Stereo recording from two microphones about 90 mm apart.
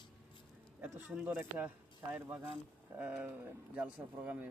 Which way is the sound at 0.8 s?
20° right (ahead or behind).